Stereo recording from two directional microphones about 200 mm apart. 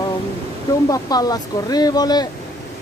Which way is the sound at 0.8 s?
20° left (ahead or behind).